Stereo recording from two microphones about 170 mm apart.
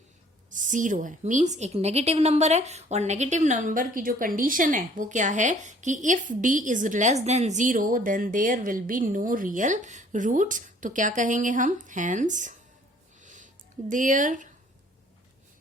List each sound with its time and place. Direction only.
0.5 s a woman's voice: 50° right (ahead or behind)
13.2 s music: 50° right (ahead or behind)
13.9 s a woman's voice: 50° right (ahead or behind)